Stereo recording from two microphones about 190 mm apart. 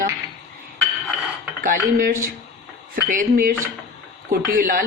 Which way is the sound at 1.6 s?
50° right (ahead or behind).